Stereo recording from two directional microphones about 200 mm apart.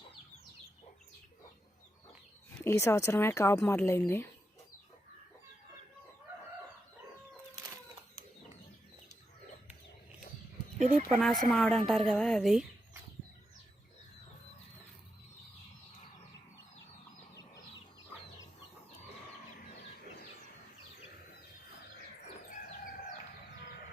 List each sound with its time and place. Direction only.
2.6 s speech: 15° left (ahead or behind)
10.8 s speech: 35° right (ahead or behind)
11.2 s a woman's voice: centre (ahead or behind)